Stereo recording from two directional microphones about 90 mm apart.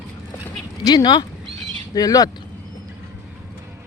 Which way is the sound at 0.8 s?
50° left (ahead or behind).